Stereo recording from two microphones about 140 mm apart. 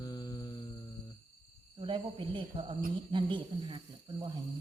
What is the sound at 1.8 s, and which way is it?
Speech, 35° right (ahead or behind).